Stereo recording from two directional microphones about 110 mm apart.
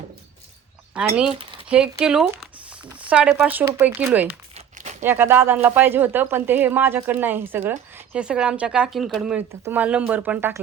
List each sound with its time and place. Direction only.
0.9 s speech: 10° right (ahead or behind)
4.5 s crumpling: 90° right
5.0 s speech: 20° right (ahead or behind)
8.1 s speech: 10° right (ahead or behind)
9.5 s speech: 25° right (ahead or behind)
9.8 s speech: 15° right (ahead or behind)